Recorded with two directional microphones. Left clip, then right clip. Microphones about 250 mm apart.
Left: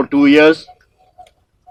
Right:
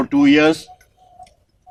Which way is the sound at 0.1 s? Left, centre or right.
Right.